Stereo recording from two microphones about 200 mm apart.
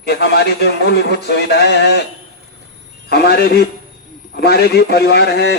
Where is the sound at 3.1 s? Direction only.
55° left (ahead or behind).